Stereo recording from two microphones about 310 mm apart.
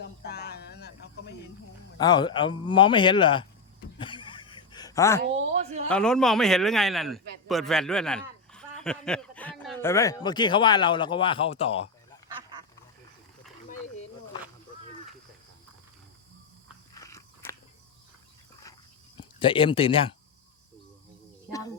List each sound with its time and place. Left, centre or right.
0.0 s a sound: left
2.0 s speech: centre
4.0 s a sound: centre
5.5 s speech: right
5.9 s a man's voice: centre
12.4 s duck: centre
16.9 s biting: centre
19.4 s speech: centre